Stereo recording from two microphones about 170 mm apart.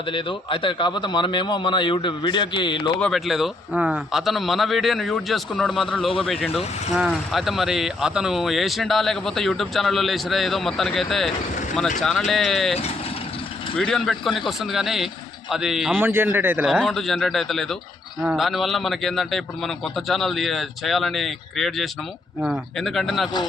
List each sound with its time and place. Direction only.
0.1 s a man's voice: 30° left (ahead or behind)
3.0 s speech: centre (ahead or behind)
13.7 s speech: 5° left (ahead or behind)
16.0 s a man's voice: 10° right (ahead or behind)
16.6 s speech: centre (ahead or behind)